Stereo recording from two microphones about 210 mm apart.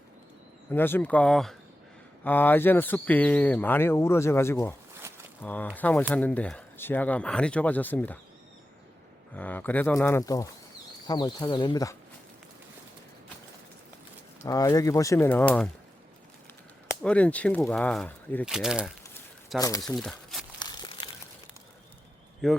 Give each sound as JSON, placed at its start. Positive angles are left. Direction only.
{"t": 0.7, "sound": "speech", "side_deg": 10}
{"t": 9.3, "sound": "speech", "side_deg": 10}
{"t": 14.4, "sound": "speech", "side_deg": 15}
{"t": 17.0, "sound": "speech", "side_deg": 5}
{"t": 19.5, "sound": "speech", "side_deg": 15}
{"t": 19.8, "sound": "speech", "side_deg": 0}
{"t": 20.6, "sound": "crumpling", "side_deg": 20}
{"t": 22.4, "sound": "speech", "side_deg": 0}